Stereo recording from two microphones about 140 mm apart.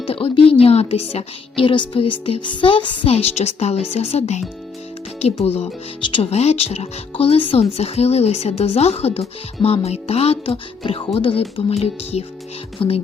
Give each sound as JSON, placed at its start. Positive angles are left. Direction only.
{"t": 0.0, "sound": "speech", "side_deg": 40}
{"t": 1.6, "sound": "speech", "side_deg": 35}
{"t": 6.4, "sound": "speech", "side_deg": 50}